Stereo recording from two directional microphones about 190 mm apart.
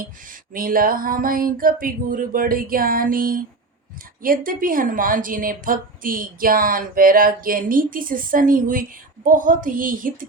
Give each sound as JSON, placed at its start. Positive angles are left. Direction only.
{"t": 0.5, "sound": "a woman's voice", "side_deg": -50}